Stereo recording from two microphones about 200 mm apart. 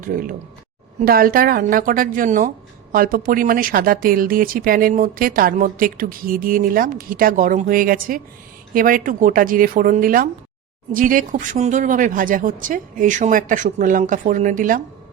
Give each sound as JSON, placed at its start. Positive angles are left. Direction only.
{"t": 0.0, "sound": "a woman's voice", "side_deg": -45}